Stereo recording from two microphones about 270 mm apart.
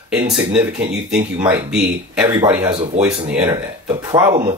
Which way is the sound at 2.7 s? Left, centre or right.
Centre.